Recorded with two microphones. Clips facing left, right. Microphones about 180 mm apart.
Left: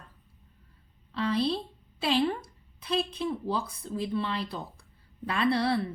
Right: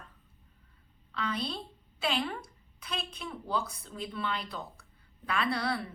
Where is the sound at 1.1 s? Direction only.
30° left (ahead or behind).